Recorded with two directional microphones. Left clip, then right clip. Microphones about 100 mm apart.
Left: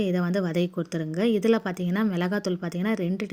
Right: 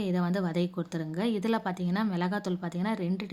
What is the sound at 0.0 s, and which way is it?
A woman's voice, 25° left (ahead or behind).